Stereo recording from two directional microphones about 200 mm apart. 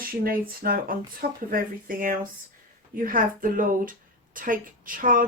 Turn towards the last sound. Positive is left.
turn(degrees=-40)  # may be behind; listen again after turning